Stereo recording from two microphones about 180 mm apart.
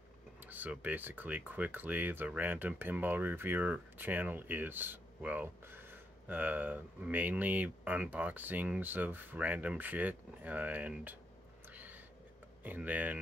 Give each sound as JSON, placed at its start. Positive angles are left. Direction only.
{"t": 0.5, "sound": "speech", "side_deg": -10}
{"t": 11.7, "sound": "a sound", "side_deg": -10}
{"t": 12.6, "sound": "speech", "side_deg": -10}